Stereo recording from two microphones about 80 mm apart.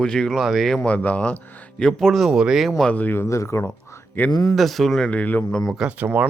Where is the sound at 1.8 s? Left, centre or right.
Centre.